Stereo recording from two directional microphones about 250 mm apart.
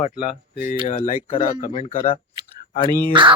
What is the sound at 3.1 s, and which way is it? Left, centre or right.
Speech, centre.